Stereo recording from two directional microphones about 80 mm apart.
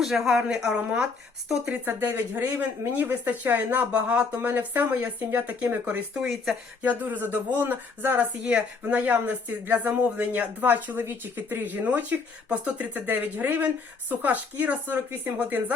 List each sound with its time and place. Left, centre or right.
0.0 s a woman's voice: centre; by 6.1 s right
6.1 s speech: centre
6.8 s speech: right